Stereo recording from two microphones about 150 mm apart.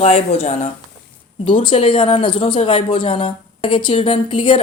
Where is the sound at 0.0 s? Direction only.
40° left (ahead or behind).